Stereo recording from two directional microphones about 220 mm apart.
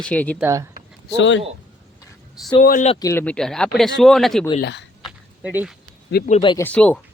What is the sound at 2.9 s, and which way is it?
Speech, 15° left (ahead or behind).